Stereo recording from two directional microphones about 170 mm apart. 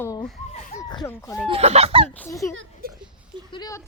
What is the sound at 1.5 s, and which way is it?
Speech, 35° right (ahead or behind).